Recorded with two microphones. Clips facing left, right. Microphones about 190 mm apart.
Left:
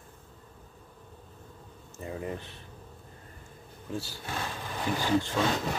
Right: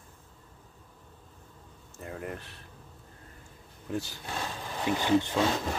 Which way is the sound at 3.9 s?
20° right (ahead or behind).